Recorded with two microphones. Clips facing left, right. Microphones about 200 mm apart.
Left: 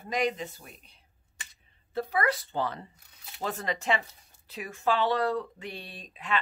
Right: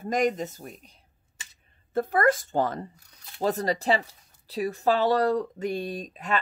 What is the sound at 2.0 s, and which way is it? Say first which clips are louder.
Speech: right 6 dB; 50° right (ahead or behind).